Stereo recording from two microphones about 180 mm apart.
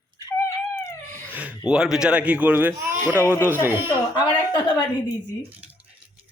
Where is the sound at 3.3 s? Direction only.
15° left (ahead or behind).